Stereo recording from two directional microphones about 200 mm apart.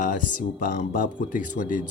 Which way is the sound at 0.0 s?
40° left (ahead or behind).